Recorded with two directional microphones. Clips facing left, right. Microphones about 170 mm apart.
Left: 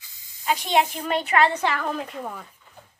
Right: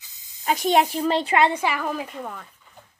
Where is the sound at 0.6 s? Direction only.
40° right (ahead or behind); by 2.2 s 5° right (ahead or behind).